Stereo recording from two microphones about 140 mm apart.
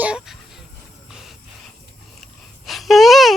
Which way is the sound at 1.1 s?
5° right (ahead or behind).